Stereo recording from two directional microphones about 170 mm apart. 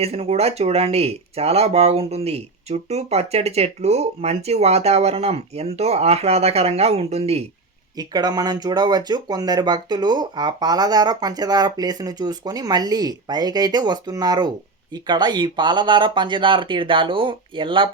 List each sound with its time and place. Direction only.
0.0 s speech: 40° right (ahead or behind)
7.9 s speech: 25° right (ahead or behind)